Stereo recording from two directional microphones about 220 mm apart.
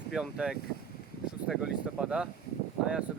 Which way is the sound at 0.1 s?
Centre (ahead or behind).